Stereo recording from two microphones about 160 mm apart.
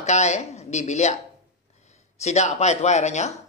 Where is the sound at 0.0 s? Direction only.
45° left (ahead or behind).